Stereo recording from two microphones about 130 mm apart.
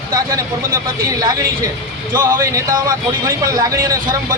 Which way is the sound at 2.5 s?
25° right (ahead or behind).